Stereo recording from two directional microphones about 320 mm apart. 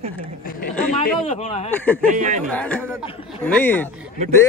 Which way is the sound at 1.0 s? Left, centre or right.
Centre.